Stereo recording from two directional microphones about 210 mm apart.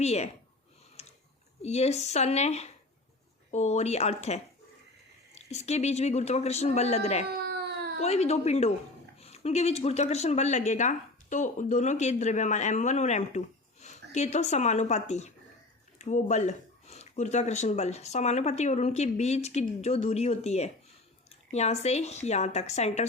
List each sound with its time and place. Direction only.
0.0 s speech: 30° left (ahead or behind)
1.0 s a sound: 30° left (ahead or behind)
1.6 s speech: 30° left (ahead or behind)
7.4 s baby cry: 50° right (ahead or behind)
8.0 s speech: 30° left (ahead or behind)